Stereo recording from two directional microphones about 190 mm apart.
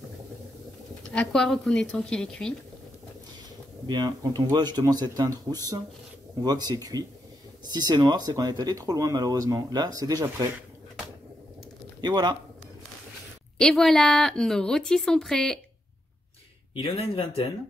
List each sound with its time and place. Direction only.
1.1 s a woman's voice: 5° left (ahead or behind)
3.8 s speech: 20° right (ahead or behind)
12.0 s speech: 20° right (ahead or behind)
13.6 s a woman's voice: 5° left (ahead or behind)
16.7 s speech: 30° left (ahead or behind)